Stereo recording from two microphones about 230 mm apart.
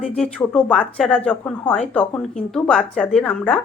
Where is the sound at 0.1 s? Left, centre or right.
Centre.